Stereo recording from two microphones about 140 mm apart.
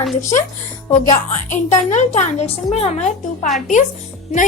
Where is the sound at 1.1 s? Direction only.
60° left (ahead or behind).